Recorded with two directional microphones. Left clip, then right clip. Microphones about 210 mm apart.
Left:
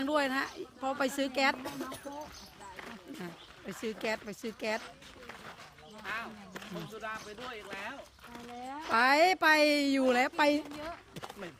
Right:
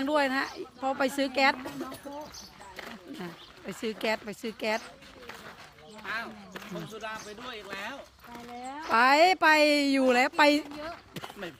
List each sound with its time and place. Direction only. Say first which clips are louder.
0.0 s a woman's voice: right 4 dB; 10° right (ahead or behind)
1.6 s speech: right 2 dB; 15° left (ahead or behind)
3.2 s a woman's voice: right 3 dB; 15° right (ahead or behind)
7.0 s speech: even; 55° right (ahead or behind)
8.8 s a woman's voice: right 4 dB; 10° right (ahead or behind)